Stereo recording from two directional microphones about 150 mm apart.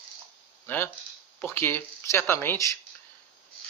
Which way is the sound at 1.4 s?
15° left (ahead or behind).